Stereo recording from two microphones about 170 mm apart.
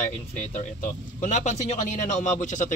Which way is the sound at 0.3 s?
50° left (ahead or behind).